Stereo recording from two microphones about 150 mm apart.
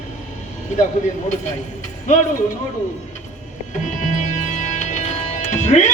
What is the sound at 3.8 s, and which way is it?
Music, 55° left (ahead or behind).